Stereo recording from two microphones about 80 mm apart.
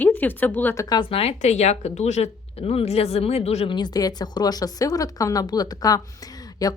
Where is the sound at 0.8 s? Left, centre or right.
Left.